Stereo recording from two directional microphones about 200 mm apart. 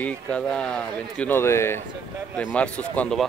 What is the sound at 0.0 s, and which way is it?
A man's voice, 5° left (ahead or behind).